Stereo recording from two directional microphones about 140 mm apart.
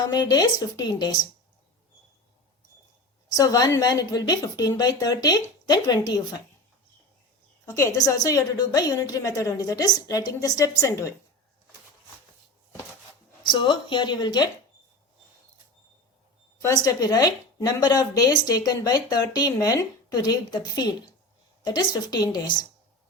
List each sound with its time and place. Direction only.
0.1 s speech: 30° left (ahead or behind)
3.2 s speech: 25° left (ahead or behind)
7.6 s speech: 20° left (ahead or behind)
13.4 s speech: 35° left (ahead or behind)
16.6 s speech: 25° left (ahead or behind)